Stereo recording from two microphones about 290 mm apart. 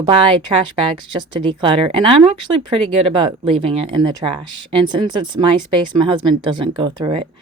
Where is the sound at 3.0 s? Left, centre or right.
Centre.